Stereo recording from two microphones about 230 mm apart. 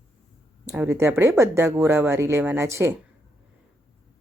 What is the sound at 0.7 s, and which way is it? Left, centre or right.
Speech, centre.